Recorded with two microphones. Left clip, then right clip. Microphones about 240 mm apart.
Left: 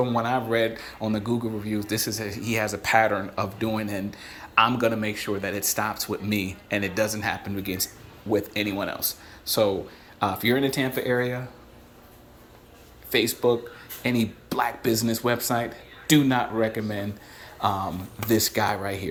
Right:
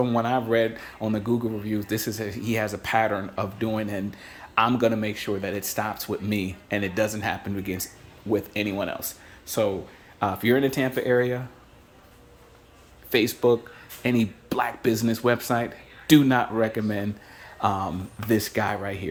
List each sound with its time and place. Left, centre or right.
0.0 s speech: right
10.2 s speech: right
13.1 s speech: right